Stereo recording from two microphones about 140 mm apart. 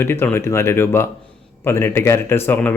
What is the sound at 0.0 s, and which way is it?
Speech, 15° left (ahead or behind).